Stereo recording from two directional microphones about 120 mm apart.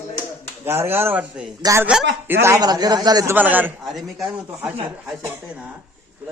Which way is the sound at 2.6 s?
35° right (ahead or behind).